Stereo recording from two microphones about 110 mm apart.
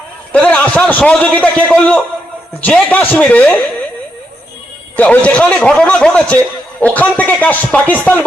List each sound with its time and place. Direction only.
0.3 s a man's voice: 10° left (ahead or behind)
4.9 s a man's voice: 10° left (ahead or behind)